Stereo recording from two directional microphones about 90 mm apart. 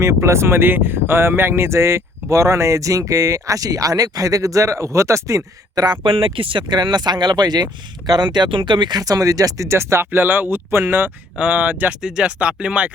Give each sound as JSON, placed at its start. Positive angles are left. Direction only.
{"t": 0.0, "sound": "speech", "side_deg": -30}
{"t": 5.8, "sound": "speech", "side_deg": -60}
{"t": 9.0, "sound": "speech", "side_deg": -40}